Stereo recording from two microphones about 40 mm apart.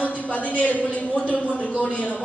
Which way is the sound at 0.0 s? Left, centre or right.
Left.